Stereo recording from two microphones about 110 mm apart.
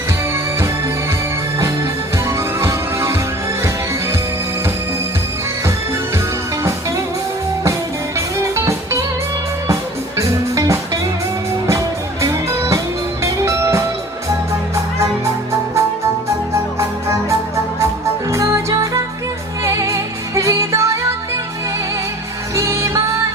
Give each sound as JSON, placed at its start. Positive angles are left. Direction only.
{"t": 2.6, "sound": "music", "side_deg": -25}
{"t": 8.4, "sound": "music", "side_deg": -25}
{"t": 10.2, "sound": "music", "side_deg": -30}
{"t": 12.2, "sound": "music", "side_deg": -25}
{"t": 18.3, "sound": "music", "side_deg": -25}
{"t": 22.5, "sound": "music", "side_deg": -25}